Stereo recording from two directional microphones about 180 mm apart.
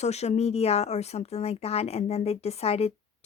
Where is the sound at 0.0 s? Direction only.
35° left (ahead or behind).